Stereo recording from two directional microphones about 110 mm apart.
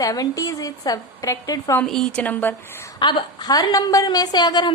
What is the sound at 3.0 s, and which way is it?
Sizzle, 45° left (ahead or behind).